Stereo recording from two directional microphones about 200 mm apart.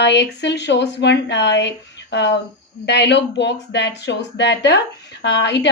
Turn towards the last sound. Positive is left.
turn(degrees=60)  # may be behind; listen again after turning